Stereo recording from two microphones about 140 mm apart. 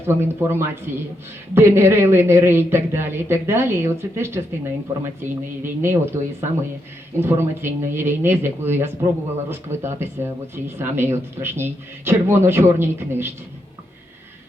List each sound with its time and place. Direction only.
0.0 s speech: 15° right (ahead or behind)